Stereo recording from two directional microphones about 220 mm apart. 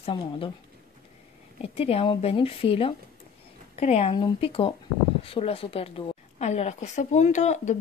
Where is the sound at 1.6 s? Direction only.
25° left (ahead or behind).